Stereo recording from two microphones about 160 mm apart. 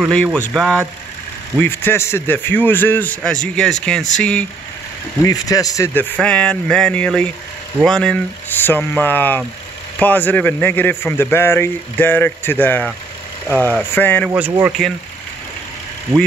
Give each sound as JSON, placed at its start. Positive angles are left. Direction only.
{"t": 0.0, "sound": "speech", "side_deg": 5}
{"t": 1.6, "sound": "a man's voice", "side_deg": 15}
{"t": 5.2, "sound": "speech", "side_deg": 20}
{"t": 6.1, "sound": "a man's voice", "side_deg": 5}
{"t": 14.3, "sound": "speech", "side_deg": -10}